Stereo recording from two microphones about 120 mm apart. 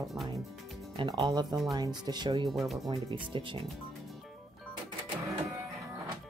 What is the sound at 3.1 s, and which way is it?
Speech, 45° right (ahead or behind).